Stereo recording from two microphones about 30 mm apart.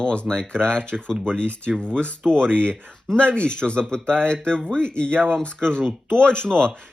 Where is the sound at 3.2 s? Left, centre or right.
Left.